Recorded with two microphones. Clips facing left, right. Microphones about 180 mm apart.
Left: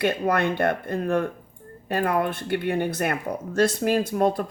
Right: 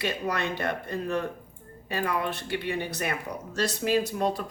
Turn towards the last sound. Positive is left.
turn(degrees=50)  # may be behind; listen again after turning